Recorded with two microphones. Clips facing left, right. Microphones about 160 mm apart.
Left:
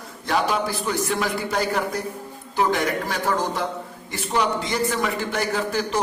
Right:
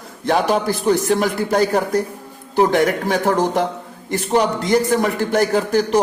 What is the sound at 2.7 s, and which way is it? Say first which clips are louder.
Speech: right 6 dB; 60° right (ahead or behind).